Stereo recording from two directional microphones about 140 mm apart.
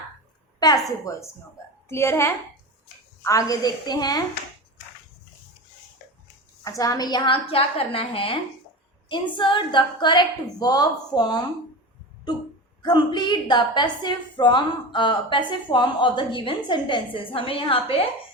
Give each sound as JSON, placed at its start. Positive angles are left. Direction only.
{"t": 1.1, "sound": "a woman's voice", "side_deg": 25}
{"t": 6.7, "sound": "a woman's voice", "side_deg": 25}
{"t": 7.5, "sound": "a woman's voice", "side_deg": 40}
{"t": 12.8, "sound": "a woman's voice", "side_deg": 30}